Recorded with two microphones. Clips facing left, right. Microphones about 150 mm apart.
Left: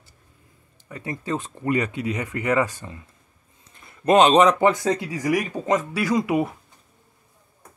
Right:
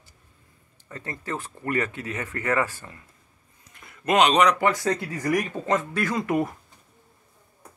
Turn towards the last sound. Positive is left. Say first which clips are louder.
# left 3 dB
turn(degrees=10)  # may be behind; listen again after turning